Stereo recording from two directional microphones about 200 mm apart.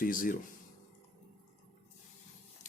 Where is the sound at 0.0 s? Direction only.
45° left (ahead or behind).